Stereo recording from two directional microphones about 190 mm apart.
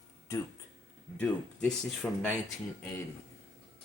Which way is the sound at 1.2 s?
5° left (ahead or behind).